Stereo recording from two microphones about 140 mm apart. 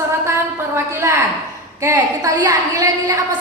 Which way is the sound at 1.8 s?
20° right (ahead or behind).